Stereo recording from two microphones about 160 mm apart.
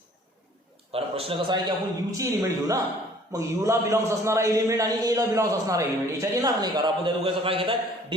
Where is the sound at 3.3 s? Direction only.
20° right (ahead or behind).